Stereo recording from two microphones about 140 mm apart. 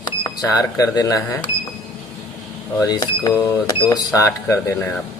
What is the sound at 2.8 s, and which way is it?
Speech, 30° left (ahead or behind).